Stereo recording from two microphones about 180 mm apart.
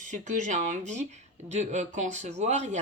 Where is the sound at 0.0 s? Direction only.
45° right (ahead or behind).